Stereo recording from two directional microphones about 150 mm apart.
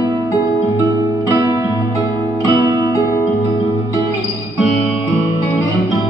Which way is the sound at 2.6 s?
20° right (ahead or behind).